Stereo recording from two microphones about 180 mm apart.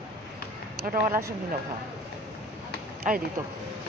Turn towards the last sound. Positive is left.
turn(degrees=-45)  # may be behind; listen again after turning